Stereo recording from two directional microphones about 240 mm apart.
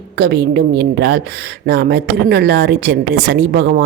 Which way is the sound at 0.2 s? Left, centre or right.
Right.